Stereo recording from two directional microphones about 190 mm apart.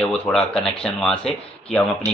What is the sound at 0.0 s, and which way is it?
Speech, 5° left (ahead or behind).